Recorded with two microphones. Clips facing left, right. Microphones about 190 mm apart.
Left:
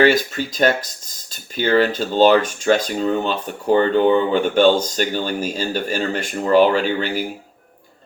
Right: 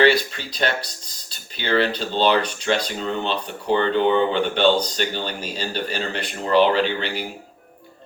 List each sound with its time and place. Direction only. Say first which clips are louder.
0.0 s speech: left 2 dB; 45° left (ahead or behind)